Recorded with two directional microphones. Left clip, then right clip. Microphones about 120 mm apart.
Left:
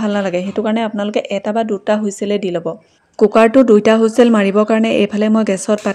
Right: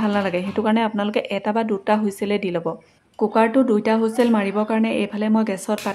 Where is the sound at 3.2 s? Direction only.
65° left (ahead or behind).